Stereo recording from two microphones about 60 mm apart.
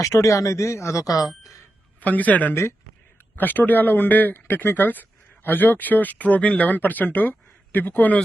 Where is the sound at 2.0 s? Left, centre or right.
Left.